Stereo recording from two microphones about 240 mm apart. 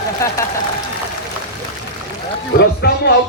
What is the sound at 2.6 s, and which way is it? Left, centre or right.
Speech, left.